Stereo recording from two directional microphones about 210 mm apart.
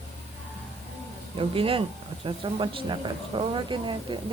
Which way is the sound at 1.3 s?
25° right (ahead or behind).